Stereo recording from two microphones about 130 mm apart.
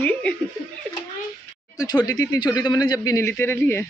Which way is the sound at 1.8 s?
30° left (ahead or behind).